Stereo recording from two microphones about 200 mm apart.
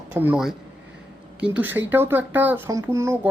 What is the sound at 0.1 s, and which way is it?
Speech, 5° right (ahead or behind).